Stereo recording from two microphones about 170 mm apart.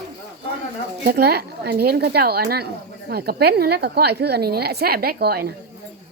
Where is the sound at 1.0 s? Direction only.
70° right (ahead or behind).